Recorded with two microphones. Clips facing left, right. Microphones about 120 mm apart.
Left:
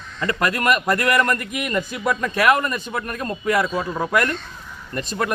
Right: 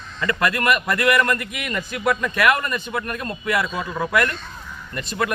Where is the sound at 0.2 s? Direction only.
30° left (ahead or behind).